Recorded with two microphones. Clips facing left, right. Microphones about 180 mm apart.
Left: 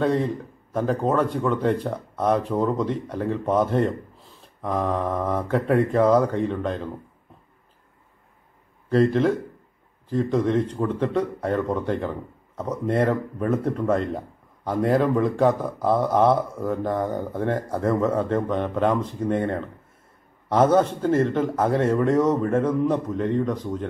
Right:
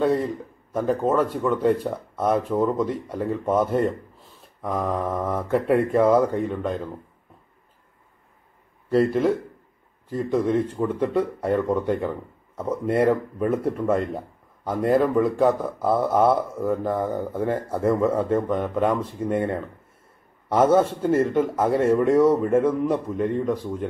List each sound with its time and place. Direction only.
0.0 s speech: 5° right (ahead or behind)
8.9 s speech: 5° right (ahead or behind)